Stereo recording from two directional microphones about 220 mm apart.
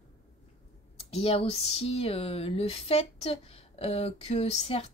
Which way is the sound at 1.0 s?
25° left (ahead or behind).